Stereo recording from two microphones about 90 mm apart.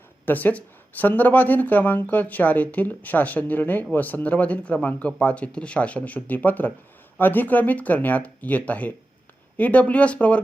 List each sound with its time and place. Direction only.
0.3 s speech: 20° left (ahead or behind)